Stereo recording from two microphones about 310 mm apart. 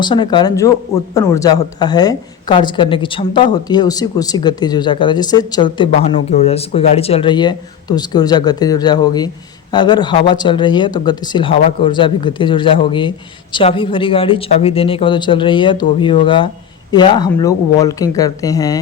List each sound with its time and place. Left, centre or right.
0.0 s a woman's voice: centre